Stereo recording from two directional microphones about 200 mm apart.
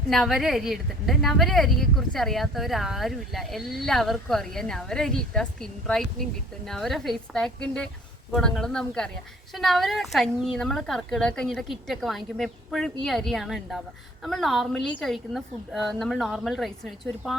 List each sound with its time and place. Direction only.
0.1 s a woman's voice: centre (ahead or behind)